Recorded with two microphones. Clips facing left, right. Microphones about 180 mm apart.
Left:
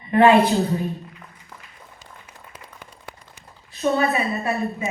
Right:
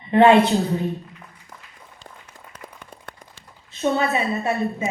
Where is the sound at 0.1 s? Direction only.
25° right (ahead or behind).